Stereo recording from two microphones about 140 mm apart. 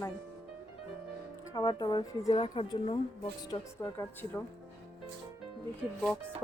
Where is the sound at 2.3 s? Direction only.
45° left (ahead or behind).